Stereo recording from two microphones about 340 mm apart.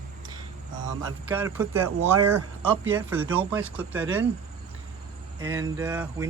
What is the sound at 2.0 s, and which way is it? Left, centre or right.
Speech, right.